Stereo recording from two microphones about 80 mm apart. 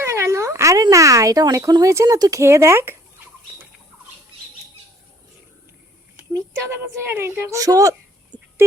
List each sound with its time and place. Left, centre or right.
0.0 s speech: right
2.4 s a woman's voice: right
6.3 s a woman's voice: right
7.6 s speech: right
8.3 s a sound: left